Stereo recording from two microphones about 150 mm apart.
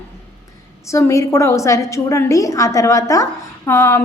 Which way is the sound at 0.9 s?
20° left (ahead or behind).